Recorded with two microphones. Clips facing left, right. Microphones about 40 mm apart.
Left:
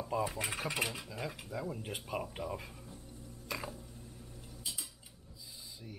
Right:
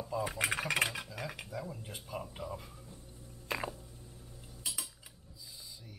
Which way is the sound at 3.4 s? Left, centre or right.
Right.